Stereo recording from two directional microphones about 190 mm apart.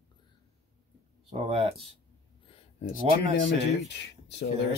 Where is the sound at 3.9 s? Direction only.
65° left (ahead or behind).